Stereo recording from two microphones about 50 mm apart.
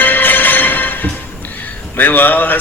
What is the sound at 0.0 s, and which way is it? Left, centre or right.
Music, left.